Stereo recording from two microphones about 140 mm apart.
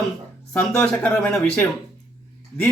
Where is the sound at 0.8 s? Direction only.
5° left (ahead or behind).